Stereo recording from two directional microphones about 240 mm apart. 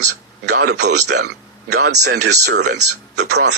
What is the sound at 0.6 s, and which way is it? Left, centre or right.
Speech, right.